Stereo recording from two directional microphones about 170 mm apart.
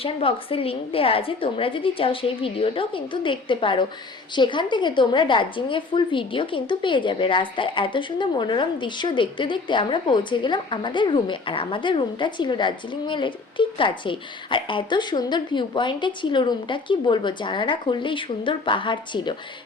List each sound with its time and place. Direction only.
0.0 s a woman's voice: 35° left (ahead or behind)